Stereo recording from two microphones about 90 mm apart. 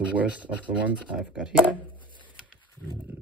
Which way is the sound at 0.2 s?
15° right (ahead or behind).